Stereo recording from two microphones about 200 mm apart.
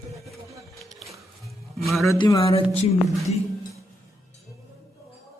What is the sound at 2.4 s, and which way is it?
Speech, 30° left (ahead or behind).